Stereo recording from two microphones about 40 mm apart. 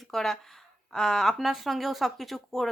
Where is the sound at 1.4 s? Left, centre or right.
Centre.